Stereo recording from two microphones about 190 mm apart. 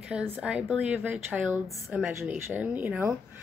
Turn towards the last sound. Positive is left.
turn(degrees=-10)  # may be behind; listen again after turning